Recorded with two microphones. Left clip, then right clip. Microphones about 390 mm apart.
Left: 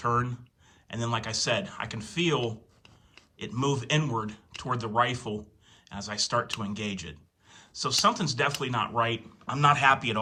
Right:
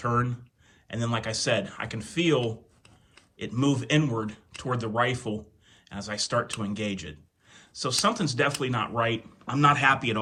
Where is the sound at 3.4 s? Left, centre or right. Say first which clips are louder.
Right 2 dB; centre.